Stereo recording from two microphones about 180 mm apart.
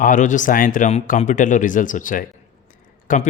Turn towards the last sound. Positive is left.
turn(degrees=50)  # may be behind; listen again after turning